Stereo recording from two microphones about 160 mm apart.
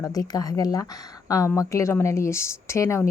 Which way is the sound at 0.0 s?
25° left (ahead or behind).